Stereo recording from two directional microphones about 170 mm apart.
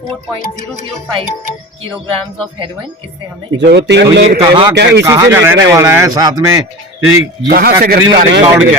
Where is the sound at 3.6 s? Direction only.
85° right.